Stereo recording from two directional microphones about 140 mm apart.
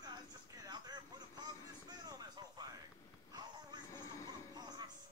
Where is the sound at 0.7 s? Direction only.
30° right (ahead or behind).